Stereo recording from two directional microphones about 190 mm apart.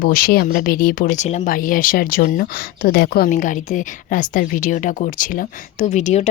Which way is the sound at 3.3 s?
40° left (ahead or behind).